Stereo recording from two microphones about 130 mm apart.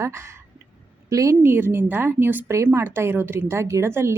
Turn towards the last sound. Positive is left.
turn(degrees=-20)  # may be behind; listen again after turning